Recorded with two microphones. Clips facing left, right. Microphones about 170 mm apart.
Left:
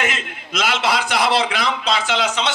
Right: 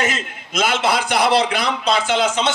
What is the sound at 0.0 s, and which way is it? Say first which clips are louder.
A man's voice: right 2 dB; 45° right (ahead or behind).